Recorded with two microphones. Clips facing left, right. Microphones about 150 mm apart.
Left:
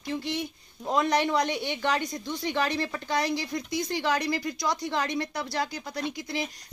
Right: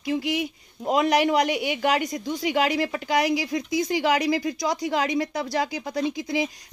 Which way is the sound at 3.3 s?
90° right.